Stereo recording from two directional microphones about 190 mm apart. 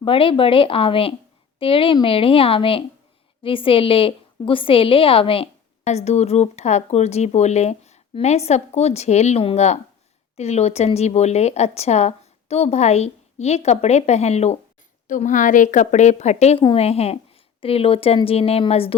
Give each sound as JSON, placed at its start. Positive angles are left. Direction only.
{"t": 0.0, "sound": "a woman's voice", "side_deg": 30}